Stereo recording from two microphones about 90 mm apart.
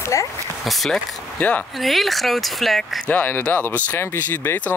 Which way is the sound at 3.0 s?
20° left (ahead or behind).